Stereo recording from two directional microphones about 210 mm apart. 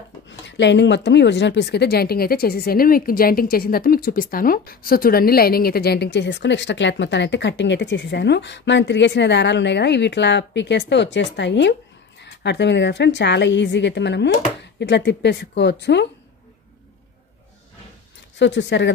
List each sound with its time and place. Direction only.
0.3 s speech: 60° left (ahead or behind)
18.4 s speech: 55° left (ahead or behind)